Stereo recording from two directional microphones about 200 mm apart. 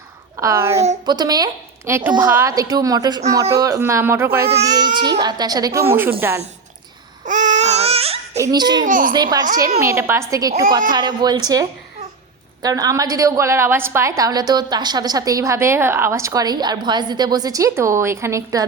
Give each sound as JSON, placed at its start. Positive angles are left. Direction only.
{"t": 0.3, "sound": "a woman's voice", "side_deg": -15}
{"t": 7.3, "sound": "baby cry", "side_deg": -35}
{"t": 8.4, "sound": "a woman's voice", "side_deg": -20}
{"t": 8.9, "sound": "a child's voice", "side_deg": -40}
{"t": 9.1, "sound": "a woman's voice", "side_deg": -20}
{"t": 12.6, "sound": "a woman's voice", "side_deg": -15}